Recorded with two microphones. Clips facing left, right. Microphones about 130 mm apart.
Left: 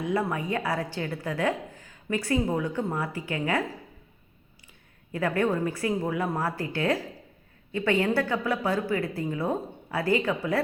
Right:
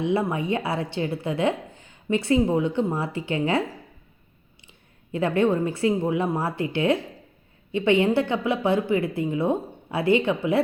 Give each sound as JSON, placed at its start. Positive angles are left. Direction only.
{"t": 0.0, "sound": "a woman's voice", "side_deg": -25}
{"t": 5.1, "sound": "a woman's voice", "side_deg": -25}